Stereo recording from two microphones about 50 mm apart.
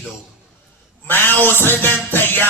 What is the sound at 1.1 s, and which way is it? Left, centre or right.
Music, left.